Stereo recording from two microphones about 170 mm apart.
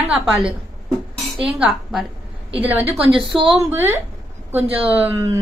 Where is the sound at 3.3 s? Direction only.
Centre (ahead or behind).